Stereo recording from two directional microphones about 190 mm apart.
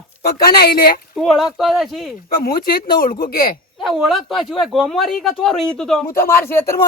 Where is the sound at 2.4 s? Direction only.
50° left (ahead or behind).